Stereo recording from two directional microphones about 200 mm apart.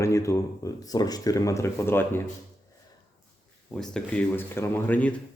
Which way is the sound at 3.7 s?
5° left (ahead or behind).